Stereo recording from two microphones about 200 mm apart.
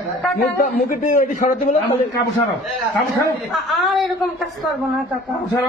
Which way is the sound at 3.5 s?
Centre (ahead or behind).